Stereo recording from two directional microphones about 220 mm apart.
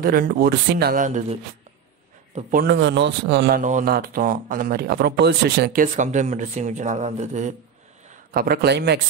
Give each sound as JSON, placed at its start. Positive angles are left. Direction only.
{"t": 0.0, "sound": "a man's voice", "side_deg": -40}